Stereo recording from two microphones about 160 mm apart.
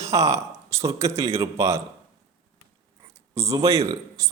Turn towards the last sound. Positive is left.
turn(degrees=-20)  # may be behind; listen again after turning